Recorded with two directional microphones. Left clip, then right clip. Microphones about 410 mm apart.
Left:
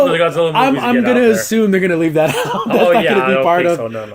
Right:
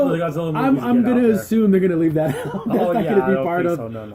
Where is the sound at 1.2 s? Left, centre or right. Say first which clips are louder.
Left 5 dB; centre.